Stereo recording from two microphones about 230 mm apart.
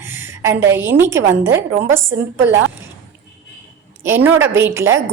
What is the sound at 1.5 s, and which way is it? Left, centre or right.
Speech, right.